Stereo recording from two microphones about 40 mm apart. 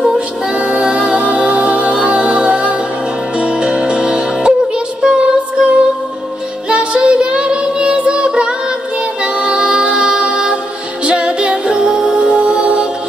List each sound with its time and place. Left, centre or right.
0.6 s music: right
6.7 s child singing: right
9.2 s music: right